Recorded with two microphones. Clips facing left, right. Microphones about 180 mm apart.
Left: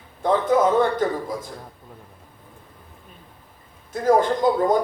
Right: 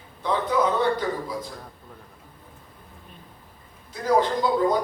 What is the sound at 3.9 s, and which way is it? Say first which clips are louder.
Speech: left 3 dB; 50° left (ahead or behind).